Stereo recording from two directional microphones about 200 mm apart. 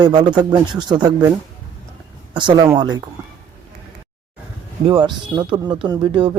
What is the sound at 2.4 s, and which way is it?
Speech, 25° right (ahead or behind).